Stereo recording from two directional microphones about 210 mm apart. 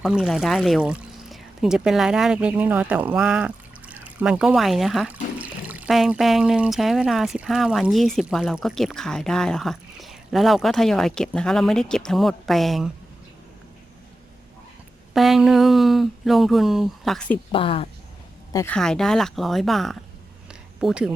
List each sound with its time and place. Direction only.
0.0 s speech: centre (ahead or behind)
15.1 s speech: centre (ahead or behind)
17.5 s speech: 25° left (ahead or behind)
18.5 s speech: 10° left (ahead or behind)
20.5 s a sound: 5° right (ahead or behind)